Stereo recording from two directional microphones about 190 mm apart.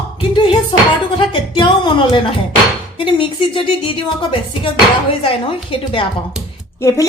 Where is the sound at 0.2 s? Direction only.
25° left (ahead or behind).